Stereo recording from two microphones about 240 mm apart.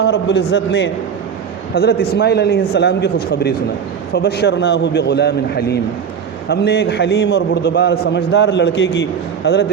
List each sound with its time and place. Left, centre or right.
0.0 s a man's voice: left